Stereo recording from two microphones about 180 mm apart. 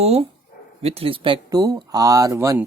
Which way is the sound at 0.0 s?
35° right (ahead or behind).